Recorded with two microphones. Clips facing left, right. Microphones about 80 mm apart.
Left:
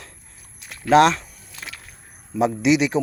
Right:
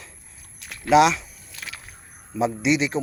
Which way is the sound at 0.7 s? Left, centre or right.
Left.